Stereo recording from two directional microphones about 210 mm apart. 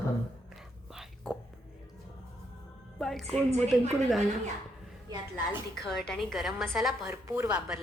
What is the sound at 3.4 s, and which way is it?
Speech, 30° right (ahead or behind).